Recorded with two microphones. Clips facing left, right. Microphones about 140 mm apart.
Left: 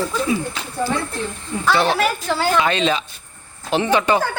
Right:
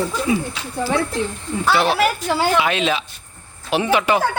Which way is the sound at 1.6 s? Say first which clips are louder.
Even; 5° right (ahead or behind).